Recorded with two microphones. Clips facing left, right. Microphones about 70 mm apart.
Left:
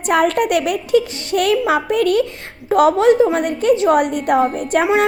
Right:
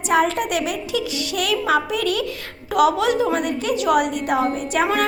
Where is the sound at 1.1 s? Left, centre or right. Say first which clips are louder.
Left 6 dB; left.